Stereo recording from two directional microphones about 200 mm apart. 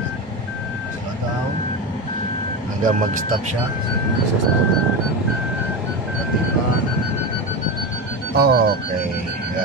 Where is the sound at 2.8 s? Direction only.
40° right (ahead or behind).